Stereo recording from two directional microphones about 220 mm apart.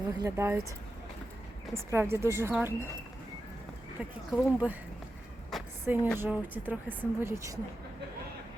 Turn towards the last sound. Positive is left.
turn(degrees=-10)  # may be behind; listen again after turning